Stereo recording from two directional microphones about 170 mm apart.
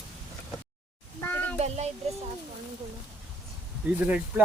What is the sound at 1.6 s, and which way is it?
Speech, 40° right (ahead or behind).